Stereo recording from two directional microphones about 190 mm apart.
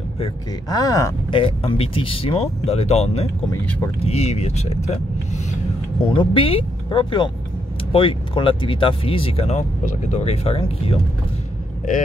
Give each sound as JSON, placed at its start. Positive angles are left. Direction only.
{"t": 0.2, "sound": "speech", "side_deg": 20}
{"t": 1.4, "sound": "speech", "side_deg": 30}